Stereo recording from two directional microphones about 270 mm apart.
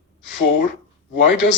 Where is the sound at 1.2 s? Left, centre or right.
Left.